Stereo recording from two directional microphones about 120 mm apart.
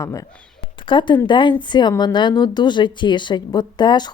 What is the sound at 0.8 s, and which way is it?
Speech, 40° left (ahead or behind).